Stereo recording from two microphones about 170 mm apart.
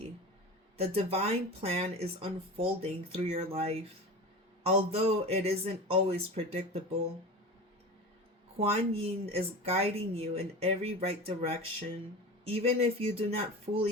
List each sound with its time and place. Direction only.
0.8 s speech: 35° right (ahead or behind)
8.5 s speech: 35° right (ahead or behind)